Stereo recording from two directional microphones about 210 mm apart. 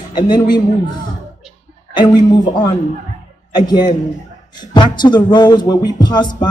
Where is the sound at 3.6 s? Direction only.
20° left (ahead or behind).